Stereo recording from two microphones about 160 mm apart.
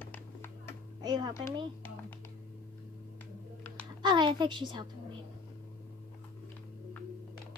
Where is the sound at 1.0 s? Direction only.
25° right (ahead or behind).